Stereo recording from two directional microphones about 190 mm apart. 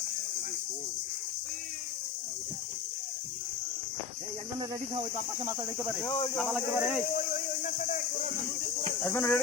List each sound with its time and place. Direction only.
5.5 s speech: 10° right (ahead or behind)
6.0 s speech: 25° left (ahead or behind)
6.4 s speech: centre (ahead or behind)
7.2 s speech: 40° left (ahead or behind)
9.0 s speech: 10° left (ahead or behind)